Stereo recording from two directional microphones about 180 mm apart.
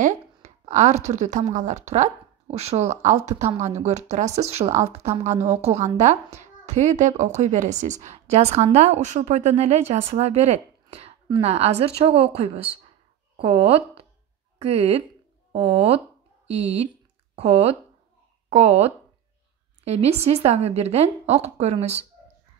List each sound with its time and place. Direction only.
0.0 s a woman's voice: 40° right (ahead or behind)